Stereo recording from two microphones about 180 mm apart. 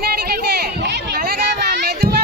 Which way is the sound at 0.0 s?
55° right (ahead or behind).